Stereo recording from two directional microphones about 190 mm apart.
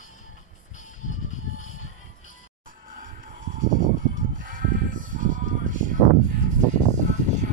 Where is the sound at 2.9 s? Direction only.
45° right (ahead or behind).